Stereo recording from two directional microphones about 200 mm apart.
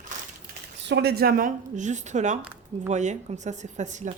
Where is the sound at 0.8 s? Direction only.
55° right (ahead or behind); by 4.1 s 35° right (ahead or behind).